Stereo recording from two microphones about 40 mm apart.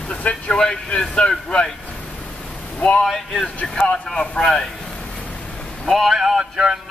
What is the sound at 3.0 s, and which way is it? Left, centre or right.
Speech, centre.